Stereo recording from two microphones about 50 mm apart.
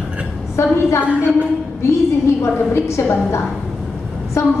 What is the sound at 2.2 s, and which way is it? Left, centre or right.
Speech, left.